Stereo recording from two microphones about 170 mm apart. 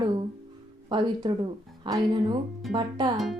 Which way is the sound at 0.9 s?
25° right (ahead or behind).